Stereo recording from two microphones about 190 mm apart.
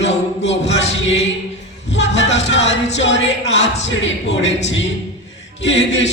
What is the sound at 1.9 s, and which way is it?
Music, 70° left (ahead or behind).